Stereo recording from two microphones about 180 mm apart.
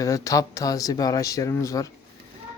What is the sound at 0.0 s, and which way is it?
Speech, 20° left (ahead or behind).